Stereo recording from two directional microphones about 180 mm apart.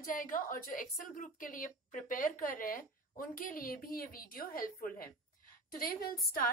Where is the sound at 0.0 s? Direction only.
50° left (ahead or behind).